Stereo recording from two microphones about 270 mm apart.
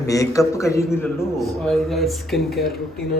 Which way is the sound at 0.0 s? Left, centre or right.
Centre.